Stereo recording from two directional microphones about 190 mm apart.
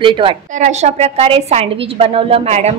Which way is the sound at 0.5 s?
40° right (ahead or behind).